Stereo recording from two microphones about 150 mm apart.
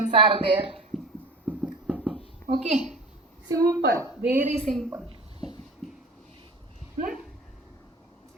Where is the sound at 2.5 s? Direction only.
45° right (ahead or behind).